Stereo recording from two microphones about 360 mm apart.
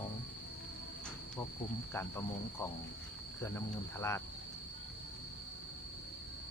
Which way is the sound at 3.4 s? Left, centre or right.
Centre.